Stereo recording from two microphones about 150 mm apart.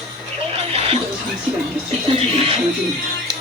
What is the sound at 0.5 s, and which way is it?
Music, 40° right (ahead or behind).